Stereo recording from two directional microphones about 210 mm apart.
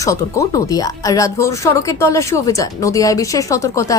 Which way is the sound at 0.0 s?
15° left (ahead or behind).